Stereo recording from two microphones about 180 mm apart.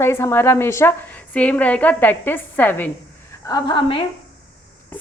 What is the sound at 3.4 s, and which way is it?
Speech, 25° left (ahead or behind).